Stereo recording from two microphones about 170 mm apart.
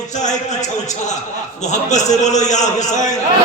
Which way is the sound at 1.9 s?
45° left (ahead or behind).